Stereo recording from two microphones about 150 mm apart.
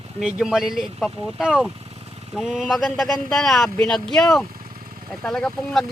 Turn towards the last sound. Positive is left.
turn(degrees=5)  # may be behind; listen again after turning